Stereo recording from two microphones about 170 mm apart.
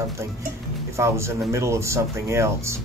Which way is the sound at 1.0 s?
15° right (ahead or behind).